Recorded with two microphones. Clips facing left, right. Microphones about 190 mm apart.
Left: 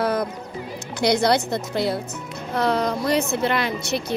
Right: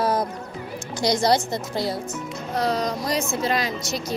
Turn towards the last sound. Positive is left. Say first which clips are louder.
# left 3 dB
turn(degrees=60)  # may be behind; listen again after turning